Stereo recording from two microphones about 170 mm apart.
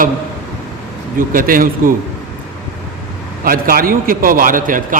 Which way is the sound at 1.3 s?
55° right (ahead or behind).